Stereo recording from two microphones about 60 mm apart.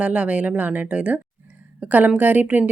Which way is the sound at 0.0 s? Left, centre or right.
Right.